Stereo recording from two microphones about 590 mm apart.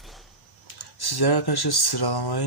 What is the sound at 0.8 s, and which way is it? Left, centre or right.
Speech, left.